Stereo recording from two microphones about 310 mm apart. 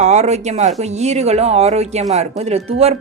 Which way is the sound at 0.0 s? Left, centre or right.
Right.